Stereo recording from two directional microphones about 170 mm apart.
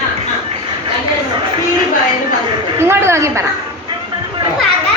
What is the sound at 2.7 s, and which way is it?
Speech, 15° right (ahead or behind).